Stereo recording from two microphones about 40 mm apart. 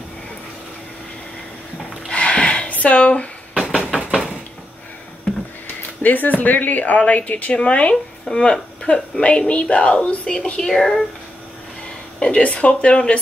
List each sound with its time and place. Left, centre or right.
2.0 s a sound: left
2.7 s speech: left
3.9 s a sound: centre
5.8 s speech: left
6.8 s speech: left
10.7 s speech: centre
12.2 s speech: left